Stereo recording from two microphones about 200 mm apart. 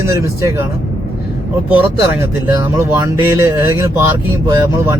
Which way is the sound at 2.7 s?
10° right (ahead or behind).